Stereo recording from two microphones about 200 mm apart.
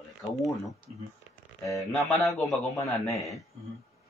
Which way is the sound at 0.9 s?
30° right (ahead or behind).